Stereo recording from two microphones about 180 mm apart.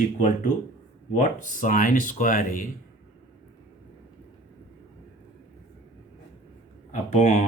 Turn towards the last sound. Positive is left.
turn(degrees=40)  # may be behind; listen again after turning